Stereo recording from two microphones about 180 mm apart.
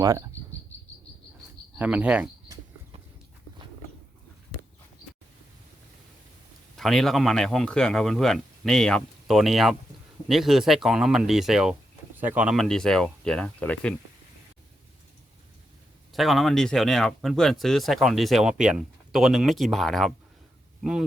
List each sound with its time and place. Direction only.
0.0 s cricket: 15° right (ahead or behind)
1.7 s speech: 10° right (ahead or behind)
6.7 s speech: centre (ahead or behind)
16.1 s speech: centre (ahead or behind)